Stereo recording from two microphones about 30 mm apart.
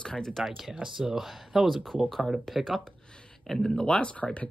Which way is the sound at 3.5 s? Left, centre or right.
Centre.